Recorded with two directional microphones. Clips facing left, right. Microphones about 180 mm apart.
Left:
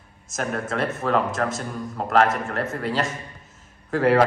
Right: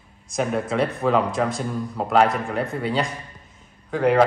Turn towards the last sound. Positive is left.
turn(degrees=0)  # may be behind; listen again after turning